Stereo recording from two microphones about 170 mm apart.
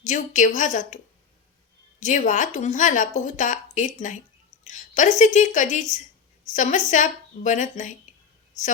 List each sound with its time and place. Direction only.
0.0 s a woman's voice: 45° left (ahead or behind)
2.0 s a woman's voice: 45° left (ahead or behind)